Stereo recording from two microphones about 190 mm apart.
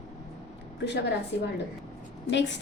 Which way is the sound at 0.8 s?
65° left (ahead or behind).